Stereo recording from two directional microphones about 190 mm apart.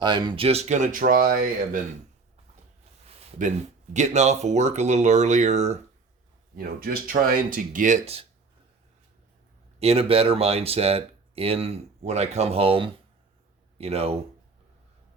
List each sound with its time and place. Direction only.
0.0 s speech: 25° right (ahead or behind); by 1.8 s 50° right (ahead or behind)
3.9 s speech: 35° right (ahead or behind)
6.6 s speech: 50° right (ahead or behind); by 8.3 s 30° right (ahead or behind)
9.8 s speech: 30° right (ahead or behind)